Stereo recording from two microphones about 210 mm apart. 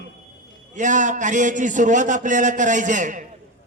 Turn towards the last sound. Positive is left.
turn(degrees=-35)  # may be behind; listen again after turning